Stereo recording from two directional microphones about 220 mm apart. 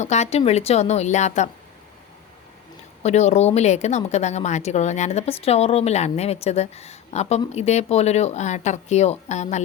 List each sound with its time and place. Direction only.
0.0 s speech: 30° left (ahead or behind)
3.0 s speech: 30° left (ahead or behind)